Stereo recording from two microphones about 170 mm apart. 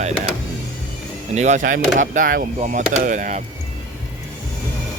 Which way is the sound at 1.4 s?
45° right (ahead or behind).